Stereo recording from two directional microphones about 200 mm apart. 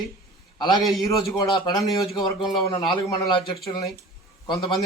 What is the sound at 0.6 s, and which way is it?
A man's voice, 20° left (ahead or behind).